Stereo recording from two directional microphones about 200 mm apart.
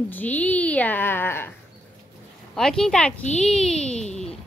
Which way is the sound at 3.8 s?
35° left (ahead or behind).